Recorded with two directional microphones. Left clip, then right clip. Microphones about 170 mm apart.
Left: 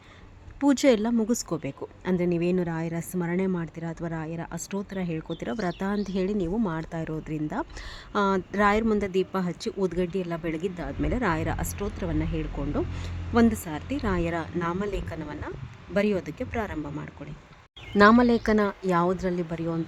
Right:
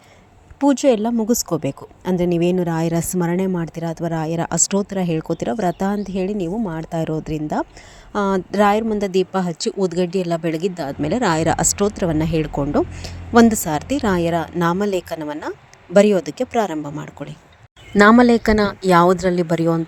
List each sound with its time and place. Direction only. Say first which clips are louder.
0.6 s a woman's voice: right 6 dB; 15° right (ahead or behind)
1.3 s a woman's voice: right 9 dB; 30° right (ahead or behind)
6.9 s speech: right 10 dB; 25° right (ahead or behind)